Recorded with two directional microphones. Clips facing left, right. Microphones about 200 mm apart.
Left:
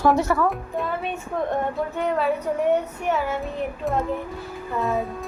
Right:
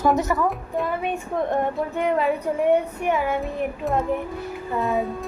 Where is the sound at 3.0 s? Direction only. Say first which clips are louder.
Right 1 dB; 15° right (ahead or behind).